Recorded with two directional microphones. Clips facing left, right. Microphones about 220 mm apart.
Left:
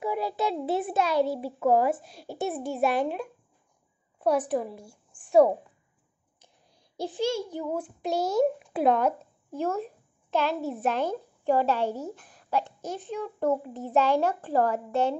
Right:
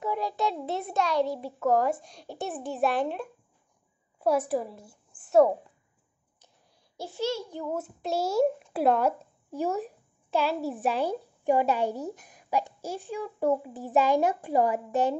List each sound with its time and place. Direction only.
0.0 s a sound: 10° left (ahead or behind)
0.7 s a child's voice: 5° left (ahead or behind)
7.0 s a child's voice: 15° left (ahead or behind)
7.7 s a child's voice: 5° right (ahead or behind)